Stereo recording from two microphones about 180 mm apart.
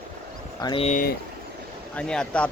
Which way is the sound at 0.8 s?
50° left (ahead or behind).